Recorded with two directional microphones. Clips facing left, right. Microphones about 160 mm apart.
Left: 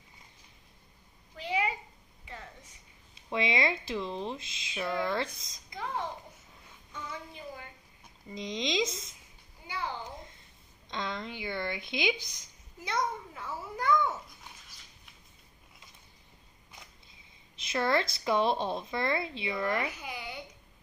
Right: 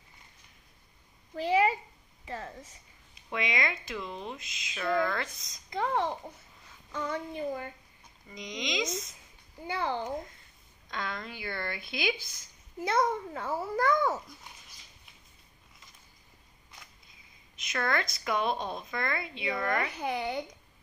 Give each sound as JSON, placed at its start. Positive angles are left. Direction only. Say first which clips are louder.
{"t": 1.3, "sound": "a sound", "louder": "right 7 dB", "side_deg": -40}
{"t": 3.3, "sound": "speech", "louder": "left 3 dB", "side_deg": 30}
{"t": 5.7, "sound": "a child's voice", "louder": "right 7 dB", "side_deg": -65}
{"t": 6.9, "sound": "child singing", "louder": "right 8 dB", "side_deg": -70}
{"t": 8.3, "sound": "speech", "louder": "left 3 dB", "side_deg": 30}
{"t": 9.7, "sound": "a child's voice", "louder": "right 6 dB", "side_deg": -55}
{"t": 10.9, "sound": "speech", "louder": "left 1 dB", "side_deg": 20}
{"t": 12.8, "sound": "a child's voice", "louder": "right 5 dB", "side_deg": -55}
{"t": 17.6, "sound": "speech", "louder": "left 3 dB", "side_deg": 30}
{"t": 20.0, "sound": "a child's voice", "louder": "right 9 dB", "side_deg": -60}